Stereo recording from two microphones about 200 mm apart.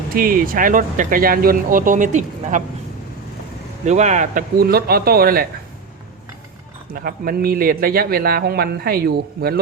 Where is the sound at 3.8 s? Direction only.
35° right (ahead or behind).